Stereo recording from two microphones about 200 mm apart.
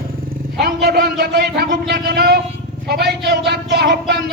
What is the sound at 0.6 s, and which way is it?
Speech, 55° right (ahead or behind).